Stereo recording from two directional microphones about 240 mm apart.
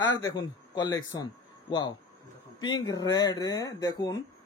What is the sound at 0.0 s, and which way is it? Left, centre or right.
A man's voice, centre.